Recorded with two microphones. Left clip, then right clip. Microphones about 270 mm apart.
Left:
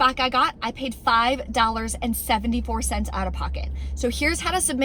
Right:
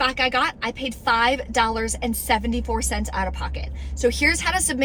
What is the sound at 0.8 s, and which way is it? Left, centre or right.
A woman's voice, centre.